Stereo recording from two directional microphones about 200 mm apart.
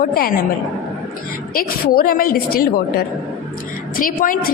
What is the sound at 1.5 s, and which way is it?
A woman's voice, 45° left (ahead or behind).